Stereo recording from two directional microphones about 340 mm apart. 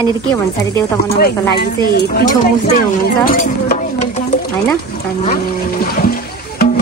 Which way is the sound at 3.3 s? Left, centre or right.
Left.